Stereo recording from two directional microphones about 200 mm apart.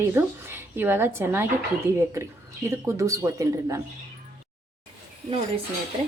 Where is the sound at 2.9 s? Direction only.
15° right (ahead or behind).